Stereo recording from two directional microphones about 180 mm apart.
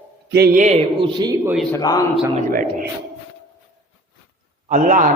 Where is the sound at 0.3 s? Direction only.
60° right (ahead or behind).